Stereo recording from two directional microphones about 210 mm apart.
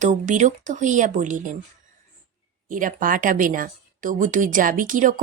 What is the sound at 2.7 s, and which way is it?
Speech, 40° right (ahead or behind).